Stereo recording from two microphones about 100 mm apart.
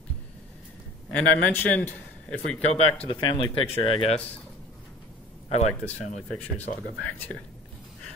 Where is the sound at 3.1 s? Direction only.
50° left (ahead or behind).